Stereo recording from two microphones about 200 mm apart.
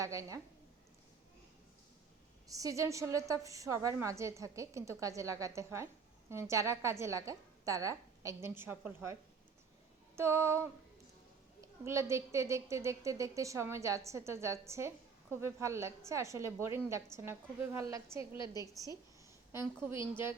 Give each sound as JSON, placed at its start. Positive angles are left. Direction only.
{"t": 0.0, "sound": "a woman's voice", "side_deg": -15}
{"t": 2.5, "sound": "a woman's voice", "side_deg": -15}
{"t": 10.2, "sound": "a woman's voice", "side_deg": -15}